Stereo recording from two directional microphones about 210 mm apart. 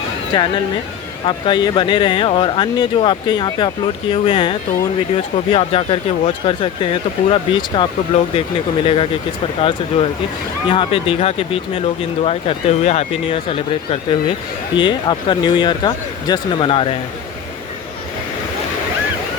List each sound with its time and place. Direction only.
1.3 s speech: 20° left (ahead or behind)